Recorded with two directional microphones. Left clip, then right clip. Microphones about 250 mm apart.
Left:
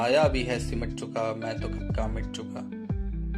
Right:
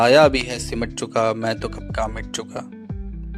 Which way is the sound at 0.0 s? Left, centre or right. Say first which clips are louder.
Right 10 dB; right.